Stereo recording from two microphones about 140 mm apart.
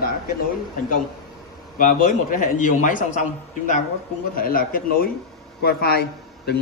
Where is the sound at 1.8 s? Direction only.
75° left (ahead or behind).